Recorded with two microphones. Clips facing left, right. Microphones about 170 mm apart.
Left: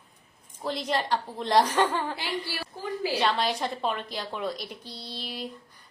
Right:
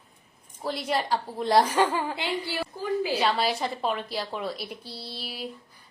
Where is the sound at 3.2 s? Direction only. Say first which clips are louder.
Right 1 dB; 5° right (ahead or behind).